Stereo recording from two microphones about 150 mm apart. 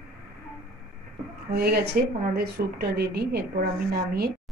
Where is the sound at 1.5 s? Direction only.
90° right.